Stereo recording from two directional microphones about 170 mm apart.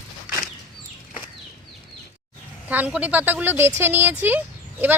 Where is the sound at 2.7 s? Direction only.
10° right (ahead or behind).